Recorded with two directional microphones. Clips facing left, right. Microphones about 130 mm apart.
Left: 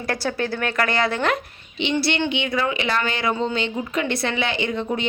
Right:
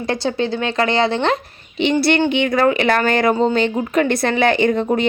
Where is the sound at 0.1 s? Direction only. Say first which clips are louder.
Right 4 dB; 20° right (ahead or behind).